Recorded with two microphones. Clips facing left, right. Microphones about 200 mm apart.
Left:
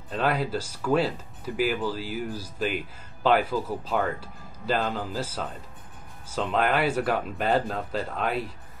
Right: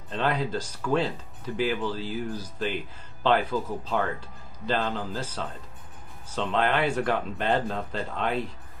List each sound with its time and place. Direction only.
0.1 s speech: 5° left (ahead or behind)